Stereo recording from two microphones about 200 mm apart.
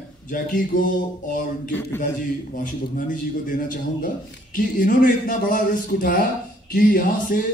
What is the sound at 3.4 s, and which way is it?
A man's voice, 45° left (ahead or behind).